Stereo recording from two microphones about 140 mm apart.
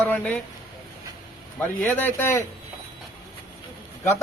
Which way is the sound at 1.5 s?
10° left (ahead or behind).